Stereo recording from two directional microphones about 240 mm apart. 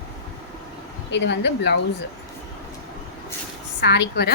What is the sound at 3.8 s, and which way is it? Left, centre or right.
Speech, left.